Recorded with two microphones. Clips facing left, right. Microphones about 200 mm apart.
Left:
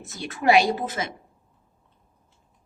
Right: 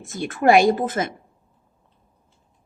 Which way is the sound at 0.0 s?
50° right (ahead or behind).